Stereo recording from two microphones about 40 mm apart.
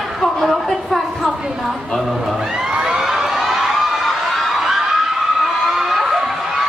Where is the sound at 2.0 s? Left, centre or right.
Centre.